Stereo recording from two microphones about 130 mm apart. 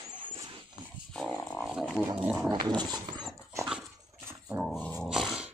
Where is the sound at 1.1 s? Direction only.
5° left (ahead or behind).